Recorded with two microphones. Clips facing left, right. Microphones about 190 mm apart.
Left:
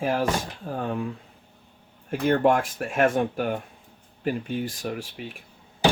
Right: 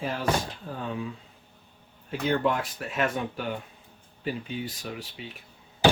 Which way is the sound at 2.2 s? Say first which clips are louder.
Left 5 dB; 50° left (ahead or behind).